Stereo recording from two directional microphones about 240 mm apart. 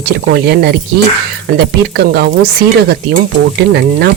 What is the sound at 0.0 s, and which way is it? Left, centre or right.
Stir, right.